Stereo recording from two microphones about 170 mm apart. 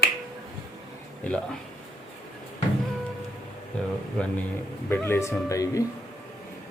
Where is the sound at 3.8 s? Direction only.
5° left (ahead or behind).